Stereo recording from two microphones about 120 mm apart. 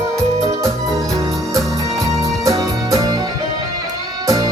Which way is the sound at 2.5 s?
25° right (ahead or behind).